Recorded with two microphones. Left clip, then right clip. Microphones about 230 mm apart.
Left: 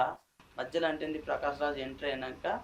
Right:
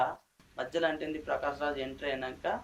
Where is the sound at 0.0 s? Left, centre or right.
Left.